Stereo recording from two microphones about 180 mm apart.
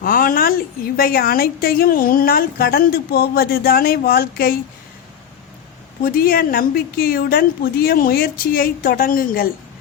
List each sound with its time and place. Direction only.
0.0 s a sound: 50° left (ahead or behind)
0.9 s a woman's voice: 55° left (ahead or behind)
6.0 s a woman's voice: 55° left (ahead or behind)